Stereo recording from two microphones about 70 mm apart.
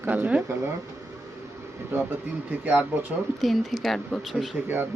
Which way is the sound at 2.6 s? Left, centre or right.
Right.